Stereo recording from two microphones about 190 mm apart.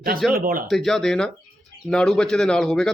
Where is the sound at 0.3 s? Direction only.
50° right (ahead or behind).